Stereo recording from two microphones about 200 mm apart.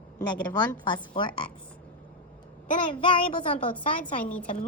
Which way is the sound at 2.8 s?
25° left (ahead or behind).